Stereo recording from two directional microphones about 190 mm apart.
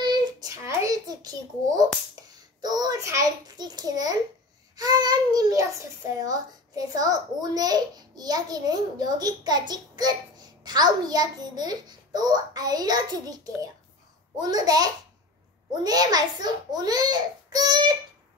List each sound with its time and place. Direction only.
0.0 s child singing: 20° right (ahead or behind)
2.1 s a child's voice: 20° right (ahead or behind)